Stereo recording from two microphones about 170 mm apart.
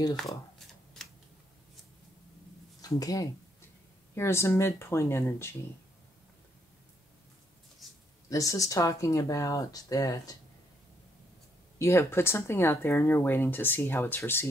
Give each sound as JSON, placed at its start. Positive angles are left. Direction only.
{"t": 2.8, "sound": "speech", "side_deg": 20}
{"t": 8.3, "sound": "speech", "side_deg": 20}
{"t": 11.8, "sound": "speech", "side_deg": 15}